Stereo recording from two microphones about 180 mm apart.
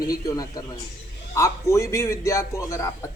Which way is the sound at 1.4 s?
15° left (ahead or behind).